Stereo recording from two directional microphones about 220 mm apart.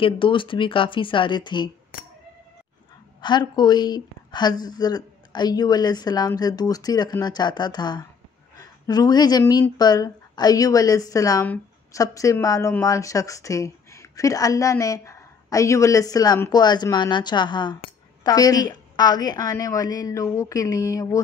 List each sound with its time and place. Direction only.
0.0 s a woman's voice: 20° left (ahead or behind)
3.2 s a woman's voice: 20° left (ahead or behind)